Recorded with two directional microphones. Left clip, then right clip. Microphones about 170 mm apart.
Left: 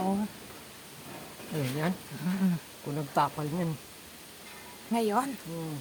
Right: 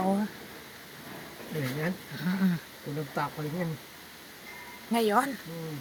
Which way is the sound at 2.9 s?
25° left (ahead or behind).